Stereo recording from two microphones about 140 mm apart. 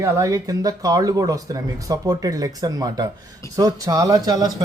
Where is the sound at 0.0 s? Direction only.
20° right (ahead or behind).